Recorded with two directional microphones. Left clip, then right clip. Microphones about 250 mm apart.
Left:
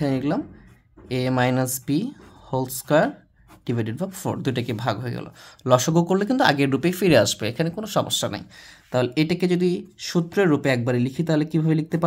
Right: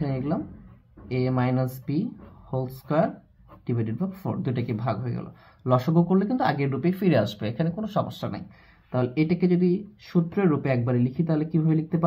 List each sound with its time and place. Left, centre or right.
0.0 s speech: left